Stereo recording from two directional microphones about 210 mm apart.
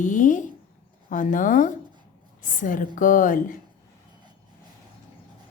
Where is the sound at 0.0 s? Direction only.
35° left (ahead or behind).